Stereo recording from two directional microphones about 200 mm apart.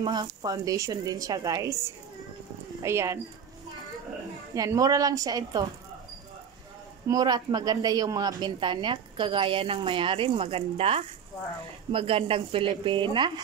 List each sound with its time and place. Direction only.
0.0 s speech: 20° right (ahead or behind)
4.6 s speech: 15° right (ahead or behind)
7.1 s speech: 20° right (ahead or behind)